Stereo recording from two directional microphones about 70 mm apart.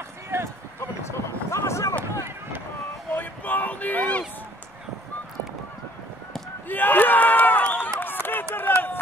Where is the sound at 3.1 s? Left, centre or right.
Left.